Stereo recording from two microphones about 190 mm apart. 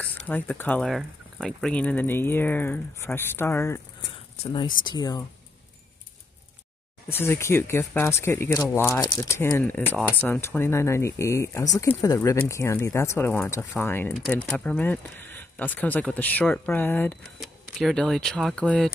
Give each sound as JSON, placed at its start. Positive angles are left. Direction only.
{"t": 0.0, "sound": "speech", "side_deg": 10}
{"t": 4.5, "sound": "speech", "side_deg": 25}
{"t": 7.1, "sound": "speech", "side_deg": 10}